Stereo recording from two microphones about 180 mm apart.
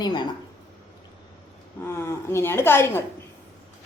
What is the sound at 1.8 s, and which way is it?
Speech, 15° left (ahead or behind).